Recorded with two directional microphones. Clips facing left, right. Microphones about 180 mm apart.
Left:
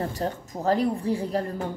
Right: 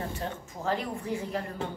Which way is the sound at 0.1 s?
40° left (ahead or behind).